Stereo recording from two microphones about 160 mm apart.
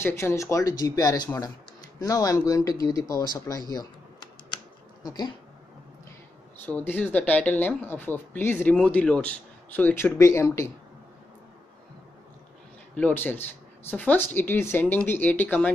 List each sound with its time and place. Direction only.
0.0 s speech: 15° left (ahead or behind)
5.0 s speech: 25° left (ahead or behind)
6.6 s speech: 10° left (ahead or behind)
12.9 s speech: 10° left (ahead or behind)